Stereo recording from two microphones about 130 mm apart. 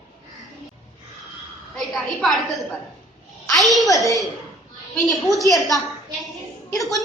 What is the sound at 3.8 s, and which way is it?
A woman's voice, 25° left (ahead or behind).